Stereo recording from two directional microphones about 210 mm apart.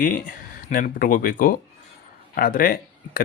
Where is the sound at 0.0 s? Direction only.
45° left (ahead or behind).